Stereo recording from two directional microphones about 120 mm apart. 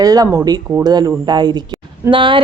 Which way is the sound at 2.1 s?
45° right (ahead or behind).